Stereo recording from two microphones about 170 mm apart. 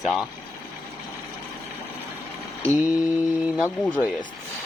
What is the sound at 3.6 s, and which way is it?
Speech, 10° left (ahead or behind).